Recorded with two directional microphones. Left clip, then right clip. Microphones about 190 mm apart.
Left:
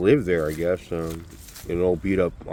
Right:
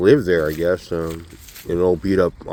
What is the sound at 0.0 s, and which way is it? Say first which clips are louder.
Speech: right 5 dB; 20° right (ahead or behind).